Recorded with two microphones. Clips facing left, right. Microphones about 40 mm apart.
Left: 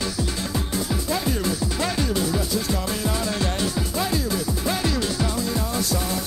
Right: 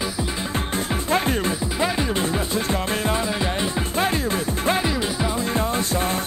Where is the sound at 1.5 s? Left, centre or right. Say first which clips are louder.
Right 2 dB; right.